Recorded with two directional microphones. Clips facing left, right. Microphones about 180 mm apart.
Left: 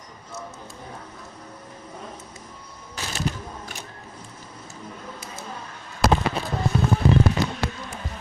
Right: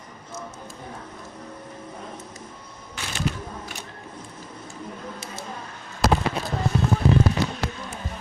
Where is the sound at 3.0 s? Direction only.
40° left (ahead or behind).